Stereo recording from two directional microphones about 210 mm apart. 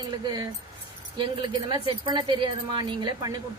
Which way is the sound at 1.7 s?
20° right (ahead or behind).